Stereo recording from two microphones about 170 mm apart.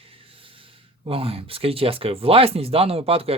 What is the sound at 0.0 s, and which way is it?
Speech, 35° right (ahead or behind).